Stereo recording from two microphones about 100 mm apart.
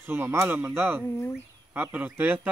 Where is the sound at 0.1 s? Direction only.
20° right (ahead or behind).